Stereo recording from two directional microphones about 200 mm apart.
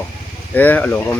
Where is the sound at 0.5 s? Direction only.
10° left (ahead or behind).